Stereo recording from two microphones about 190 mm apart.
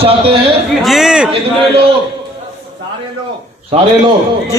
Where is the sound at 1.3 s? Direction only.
30° right (ahead or behind).